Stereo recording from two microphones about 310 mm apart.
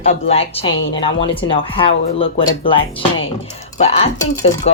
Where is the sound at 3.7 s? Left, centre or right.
Centre.